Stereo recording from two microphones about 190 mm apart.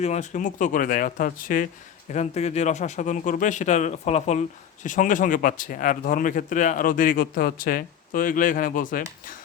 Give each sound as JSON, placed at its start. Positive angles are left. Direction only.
{"t": 0.0, "sound": "a man's voice", "side_deg": 35}
{"t": 2.1, "sound": "a man's voice", "side_deg": 35}